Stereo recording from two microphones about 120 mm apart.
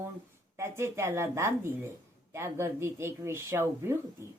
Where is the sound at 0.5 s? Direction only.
20° right (ahead or behind).